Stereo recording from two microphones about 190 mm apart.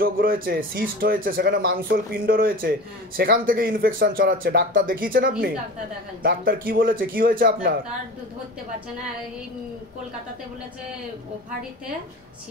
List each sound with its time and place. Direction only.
0.0 s speech: 50° right (ahead or behind)